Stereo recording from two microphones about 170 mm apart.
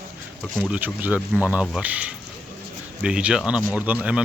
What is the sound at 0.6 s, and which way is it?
Speech, 10° right (ahead or behind).